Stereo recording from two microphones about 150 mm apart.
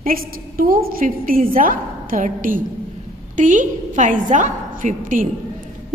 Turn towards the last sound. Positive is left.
turn(degrees=-60)  # may be behind; listen again after turning